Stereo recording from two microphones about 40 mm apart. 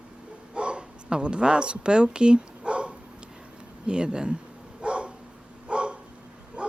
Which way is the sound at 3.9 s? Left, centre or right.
Right.